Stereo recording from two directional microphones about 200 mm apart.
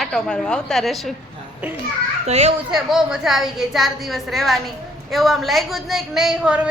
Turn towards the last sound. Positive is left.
turn(degrees=-5)  # may be behind; listen again after turning